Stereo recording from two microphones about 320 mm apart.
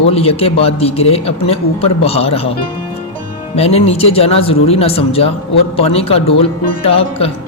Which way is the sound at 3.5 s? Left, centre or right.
Centre.